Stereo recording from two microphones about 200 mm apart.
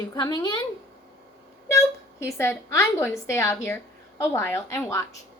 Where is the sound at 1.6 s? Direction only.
15° left (ahead or behind).